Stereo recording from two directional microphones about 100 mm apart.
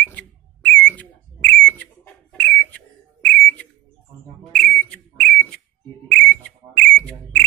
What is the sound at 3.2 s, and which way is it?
Whistle, 10° left (ahead or behind).